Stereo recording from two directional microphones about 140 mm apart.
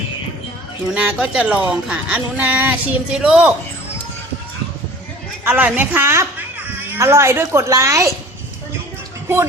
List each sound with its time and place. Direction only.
0.9 s speech: 5° right (ahead or behind)
5.5 s a woman's voice: 10° right (ahead or behind)